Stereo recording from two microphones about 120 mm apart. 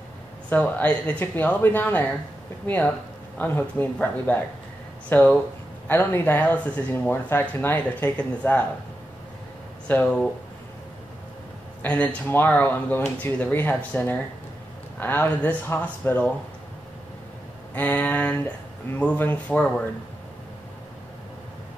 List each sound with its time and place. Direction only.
0.5 s speech: 15° left (ahead or behind)
9.8 s speech: 10° left (ahead or behind)
11.8 s speech: 10° left (ahead or behind)
17.7 s speech: 15° left (ahead or behind)